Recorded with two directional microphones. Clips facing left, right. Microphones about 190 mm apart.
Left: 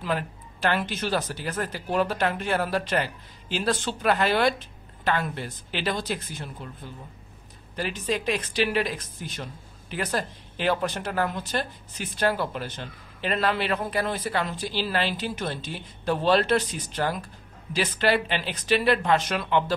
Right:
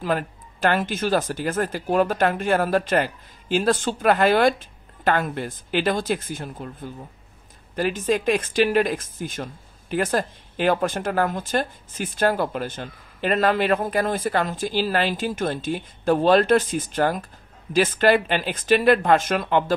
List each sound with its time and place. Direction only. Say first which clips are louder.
0.0 s speech: right 4 dB; 45° right (ahead or behind)